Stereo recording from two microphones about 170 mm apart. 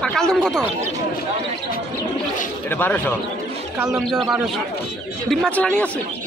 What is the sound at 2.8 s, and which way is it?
Speech, 10° left (ahead or behind).